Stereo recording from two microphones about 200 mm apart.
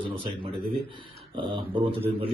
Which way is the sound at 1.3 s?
25° right (ahead or behind).